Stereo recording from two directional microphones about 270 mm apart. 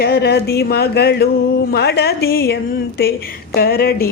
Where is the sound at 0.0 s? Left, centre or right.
Left.